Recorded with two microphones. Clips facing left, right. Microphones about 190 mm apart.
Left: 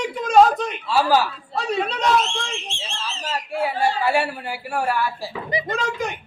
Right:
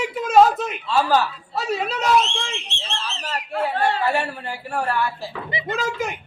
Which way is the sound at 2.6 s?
65° right (ahead or behind).